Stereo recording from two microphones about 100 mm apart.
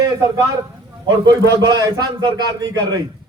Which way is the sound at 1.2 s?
45° right (ahead or behind).